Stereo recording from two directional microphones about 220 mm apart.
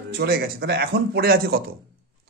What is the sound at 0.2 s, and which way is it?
A man's voice, 45° right (ahead or behind).